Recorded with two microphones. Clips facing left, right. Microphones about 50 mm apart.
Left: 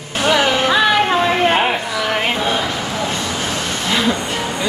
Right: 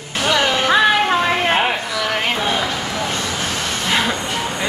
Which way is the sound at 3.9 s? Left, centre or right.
Centre.